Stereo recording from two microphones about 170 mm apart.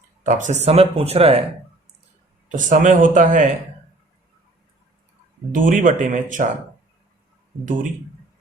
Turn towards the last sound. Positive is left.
turn(degrees=-50)  # may be behind; listen again after turning